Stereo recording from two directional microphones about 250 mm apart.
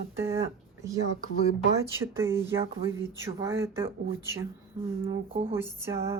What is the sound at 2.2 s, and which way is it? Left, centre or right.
Speech, centre.